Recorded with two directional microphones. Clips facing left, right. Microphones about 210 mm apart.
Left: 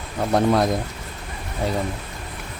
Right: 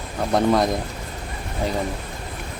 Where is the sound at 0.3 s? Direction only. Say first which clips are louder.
Even; 5° left (ahead or behind).